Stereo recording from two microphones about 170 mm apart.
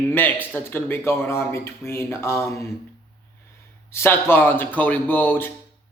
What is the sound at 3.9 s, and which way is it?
Speech, 15° left (ahead or behind).